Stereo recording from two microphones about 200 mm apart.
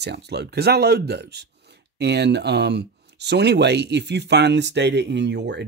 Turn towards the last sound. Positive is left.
turn(degrees=-60)  # may be behind; listen again after turning